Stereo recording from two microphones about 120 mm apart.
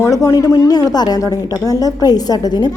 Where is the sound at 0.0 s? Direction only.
25° left (ahead or behind).